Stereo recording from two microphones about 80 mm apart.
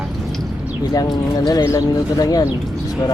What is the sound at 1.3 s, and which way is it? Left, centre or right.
Speech, left.